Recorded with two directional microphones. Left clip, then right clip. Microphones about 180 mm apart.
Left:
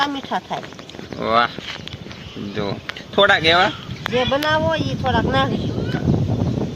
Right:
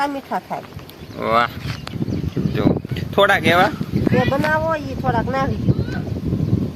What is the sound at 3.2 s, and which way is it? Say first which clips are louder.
Speech: even; 15° right (ahead or behind).